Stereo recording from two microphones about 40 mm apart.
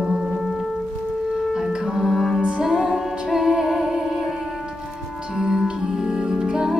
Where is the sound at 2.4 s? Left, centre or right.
Right.